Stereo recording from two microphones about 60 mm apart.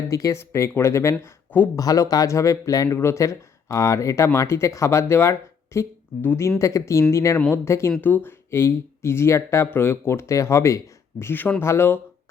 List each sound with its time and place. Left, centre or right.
0.1 s speech: left
0.3 s speech: left
1.2 s speech: left
1.7 s speech: left
3.0 s speech: left
6.6 s speech: left
8.0 s speech: left